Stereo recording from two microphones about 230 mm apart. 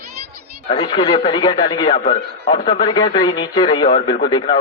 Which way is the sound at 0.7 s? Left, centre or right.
Centre.